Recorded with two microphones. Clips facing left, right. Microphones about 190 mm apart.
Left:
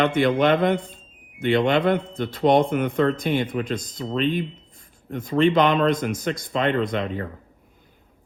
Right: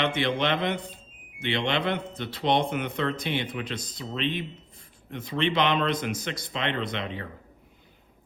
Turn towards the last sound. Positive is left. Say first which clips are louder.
# left 7 dB
turn(degrees=45)  # may be behind; listen again after turning